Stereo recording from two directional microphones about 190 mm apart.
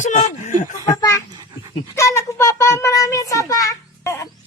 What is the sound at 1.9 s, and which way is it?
A child's voice, 15° left (ahead or behind).